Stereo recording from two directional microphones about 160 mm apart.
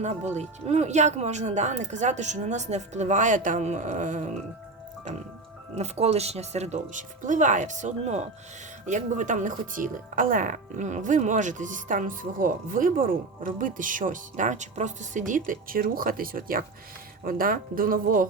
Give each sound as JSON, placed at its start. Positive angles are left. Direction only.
{"t": 0.0, "sound": "speech", "side_deg": -45}
{"t": 5.7, "sound": "speech", "side_deg": -40}